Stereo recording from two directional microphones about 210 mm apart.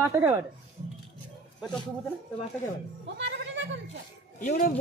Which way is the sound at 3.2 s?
60° right (ahead or behind).